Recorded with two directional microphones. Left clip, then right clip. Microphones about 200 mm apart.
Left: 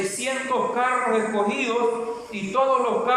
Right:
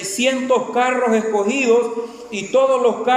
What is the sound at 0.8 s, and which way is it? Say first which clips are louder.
A man's voice: right 5 dB; 40° right (ahead or behind).